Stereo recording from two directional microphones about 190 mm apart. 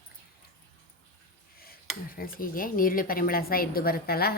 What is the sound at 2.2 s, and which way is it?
A woman's voice, 50° left (ahead or behind).